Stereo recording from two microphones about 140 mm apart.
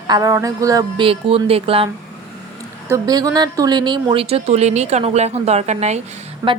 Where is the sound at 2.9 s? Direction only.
25° right (ahead or behind).